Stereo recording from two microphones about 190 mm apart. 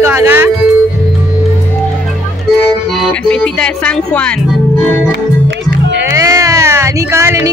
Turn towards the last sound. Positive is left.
turn(degrees=-15)  # may be behind; listen again after turning